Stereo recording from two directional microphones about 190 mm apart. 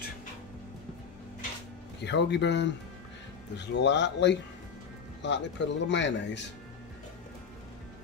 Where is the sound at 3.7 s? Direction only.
65° left (ahead or behind).